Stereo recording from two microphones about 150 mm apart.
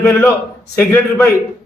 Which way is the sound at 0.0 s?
15° left (ahead or behind).